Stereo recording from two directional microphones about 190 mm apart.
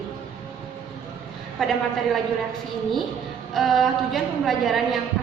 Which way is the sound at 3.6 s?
Centre (ahead or behind).